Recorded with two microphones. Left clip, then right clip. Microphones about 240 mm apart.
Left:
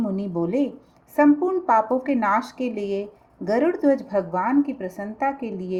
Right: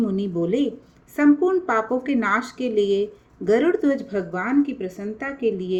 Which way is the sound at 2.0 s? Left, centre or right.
Left.